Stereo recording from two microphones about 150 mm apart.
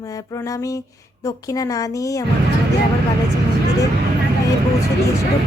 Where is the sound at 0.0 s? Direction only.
20° left (ahead or behind).